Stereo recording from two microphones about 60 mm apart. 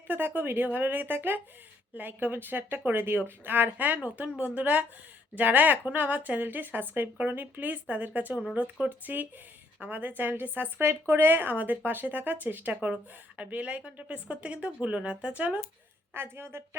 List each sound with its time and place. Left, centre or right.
0.1 s speech: right
16.1 s speech: right